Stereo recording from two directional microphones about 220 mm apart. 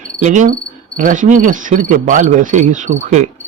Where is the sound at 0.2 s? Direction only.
35° right (ahead or behind).